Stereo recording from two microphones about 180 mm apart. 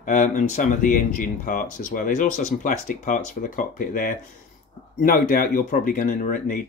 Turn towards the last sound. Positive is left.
turn(degrees=50)  # may be behind; listen again after turning